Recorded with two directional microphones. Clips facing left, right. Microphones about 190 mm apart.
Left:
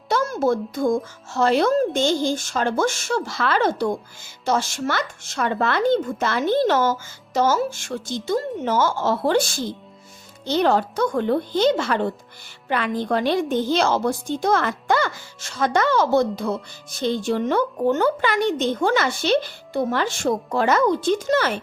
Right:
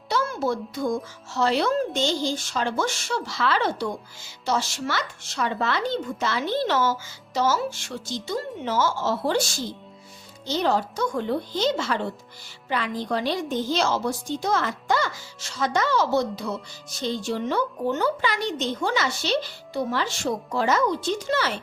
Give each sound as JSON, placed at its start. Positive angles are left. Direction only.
{"t": 0.1, "sound": "a woman's voice", "side_deg": 45}